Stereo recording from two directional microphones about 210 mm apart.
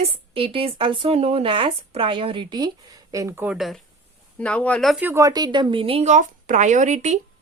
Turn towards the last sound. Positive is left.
turn(degrees=-35)  # may be behind; listen again after turning